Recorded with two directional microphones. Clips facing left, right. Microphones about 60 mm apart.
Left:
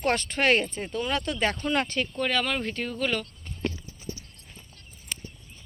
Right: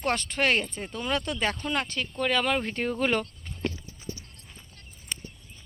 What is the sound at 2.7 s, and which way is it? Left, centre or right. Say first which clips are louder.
Speech: right 2 dB; right.